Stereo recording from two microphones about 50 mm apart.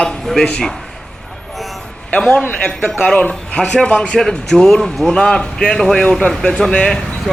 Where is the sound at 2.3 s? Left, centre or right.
Left.